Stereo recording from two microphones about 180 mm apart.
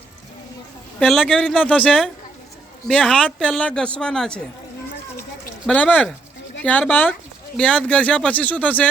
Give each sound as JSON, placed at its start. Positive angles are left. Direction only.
{"t": 0.9, "sound": "a man's voice", "side_deg": 0}
{"t": 1.5, "sound": "a man's voice", "side_deg": 5}
{"t": 5.6, "sound": "speech", "side_deg": 10}